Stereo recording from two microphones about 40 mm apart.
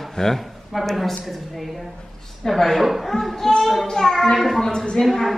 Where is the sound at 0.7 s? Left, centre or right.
Centre.